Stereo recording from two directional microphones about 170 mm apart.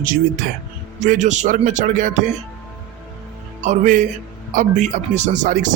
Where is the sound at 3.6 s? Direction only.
50° right (ahead or behind).